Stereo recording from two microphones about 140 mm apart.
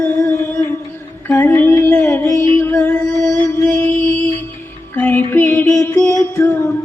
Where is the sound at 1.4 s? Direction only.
15° left (ahead or behind).